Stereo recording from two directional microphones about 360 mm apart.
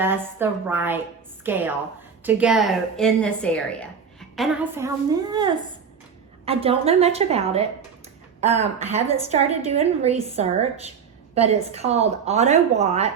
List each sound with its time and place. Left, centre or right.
0.0 s a woman's voice: centre